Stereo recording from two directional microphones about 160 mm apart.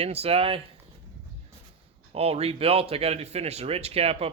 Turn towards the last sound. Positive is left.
turn(degrees=-40)  # may be behind; listen again after turning